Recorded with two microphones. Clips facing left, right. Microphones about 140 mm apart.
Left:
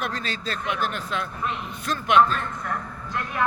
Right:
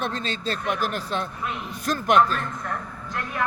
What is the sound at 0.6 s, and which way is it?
Speech, 40° right (ahead or behind).